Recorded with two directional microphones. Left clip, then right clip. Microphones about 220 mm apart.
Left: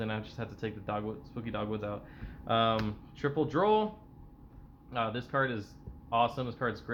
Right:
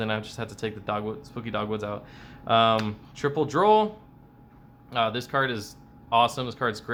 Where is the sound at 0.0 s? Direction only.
20° right (ahead or behind).